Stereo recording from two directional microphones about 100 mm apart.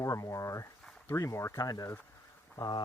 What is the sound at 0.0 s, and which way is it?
Speech, 30° left (ahead or behind).